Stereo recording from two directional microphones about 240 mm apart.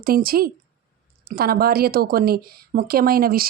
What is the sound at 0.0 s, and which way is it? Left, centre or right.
Speech, right.